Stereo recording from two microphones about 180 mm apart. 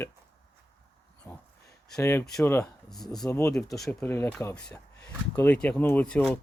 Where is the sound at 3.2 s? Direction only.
15° left (ahead or behind).